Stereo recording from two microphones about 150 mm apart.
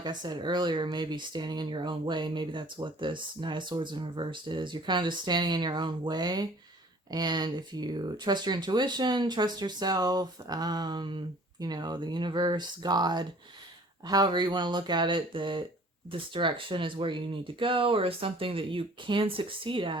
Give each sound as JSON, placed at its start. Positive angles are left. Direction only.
{"t": 0.0, "sound": "speech", "side_deg": -30}